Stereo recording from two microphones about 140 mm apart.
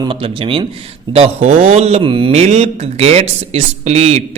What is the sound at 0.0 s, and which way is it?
Speech, 40° right (ahead or behind).